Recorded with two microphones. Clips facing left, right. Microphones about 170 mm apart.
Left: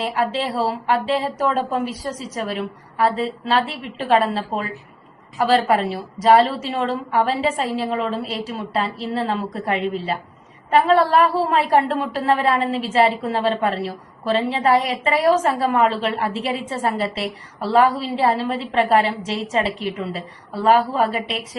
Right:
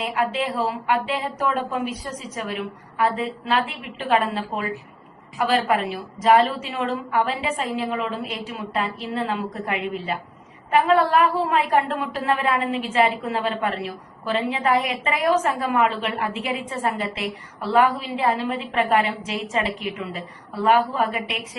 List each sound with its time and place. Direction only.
0.0 s a woman's voice: 30° left (ahead or behind)